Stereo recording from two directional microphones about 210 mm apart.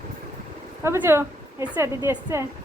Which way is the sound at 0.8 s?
10° right (ahead or behind).